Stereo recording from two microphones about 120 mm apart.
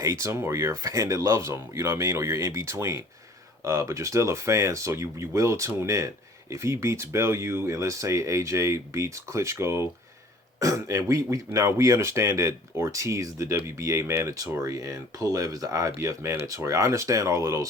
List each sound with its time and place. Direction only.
0.0 s speech: 25° right (ahead or behind)